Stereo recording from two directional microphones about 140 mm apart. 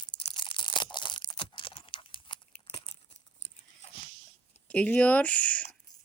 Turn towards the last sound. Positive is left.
turn(degrees=10)  # may be behind; listen again after turning